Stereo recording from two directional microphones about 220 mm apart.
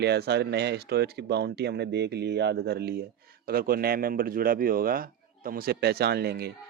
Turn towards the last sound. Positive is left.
turn(degrees=-45)  # may be behind; listen again after turning